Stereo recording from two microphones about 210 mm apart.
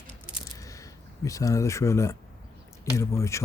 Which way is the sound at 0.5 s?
15° left (ahead or behind).